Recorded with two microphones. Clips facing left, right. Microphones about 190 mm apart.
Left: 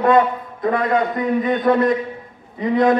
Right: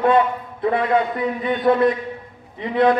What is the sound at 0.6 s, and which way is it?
A man's voice, 45° left (ahead or behind).